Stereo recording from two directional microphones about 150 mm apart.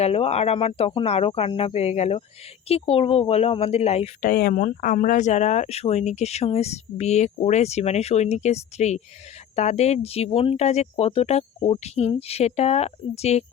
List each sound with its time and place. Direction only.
0.0 s speech: 40° left (ahead or behind)
4.3 s speech: 70° left (ahead or behind); by 13.4 s 45° left (ahead or behind)